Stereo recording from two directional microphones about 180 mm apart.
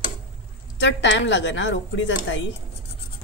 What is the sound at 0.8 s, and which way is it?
A woman's voice, 80° left.